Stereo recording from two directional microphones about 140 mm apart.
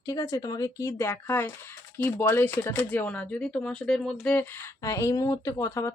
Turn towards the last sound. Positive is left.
turn(degrees=25)  # may be behind; listen again after turning